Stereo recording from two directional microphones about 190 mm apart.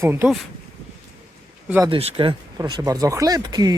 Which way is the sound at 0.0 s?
10° right (ahead or behind).